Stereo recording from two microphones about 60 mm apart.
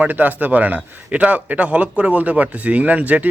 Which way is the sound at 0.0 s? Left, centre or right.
Right.